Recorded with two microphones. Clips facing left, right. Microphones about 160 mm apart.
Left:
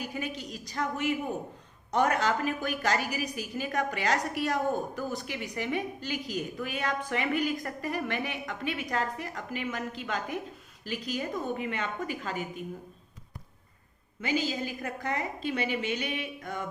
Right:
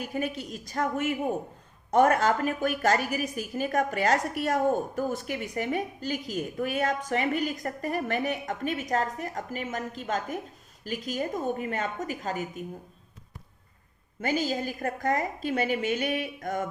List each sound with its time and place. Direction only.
0.0 s a woman's voice: 45° right (ahead or behind)
14.2 s a woman's voice: 45° right (ahead or behind)